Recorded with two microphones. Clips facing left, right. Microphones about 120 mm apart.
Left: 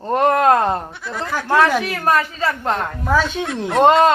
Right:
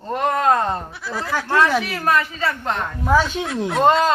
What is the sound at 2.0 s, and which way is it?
Speech, 35° left (ahead or behind).